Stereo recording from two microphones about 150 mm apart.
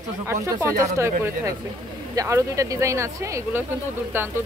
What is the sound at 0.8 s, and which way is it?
Speech, 20° right (ahead or behind).